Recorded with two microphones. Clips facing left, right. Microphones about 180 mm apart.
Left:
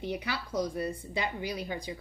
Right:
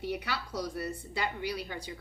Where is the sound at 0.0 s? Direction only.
20° left (ahead or behind).